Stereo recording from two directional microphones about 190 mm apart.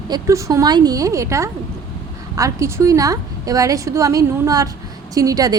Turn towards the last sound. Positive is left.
turn(degrees=-20)  # may be behind; listen again after turning